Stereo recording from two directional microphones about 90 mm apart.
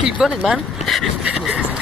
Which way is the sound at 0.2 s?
5° right (ahead or behind).